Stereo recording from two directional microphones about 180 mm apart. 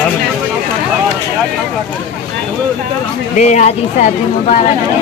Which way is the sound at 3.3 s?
40° left (ahead or behind).